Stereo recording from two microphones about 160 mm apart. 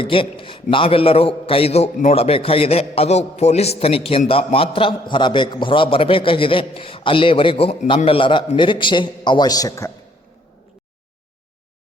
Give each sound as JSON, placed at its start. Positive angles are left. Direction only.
{"t": 0.0, "sound": "a man's voice", "side_deg": 35}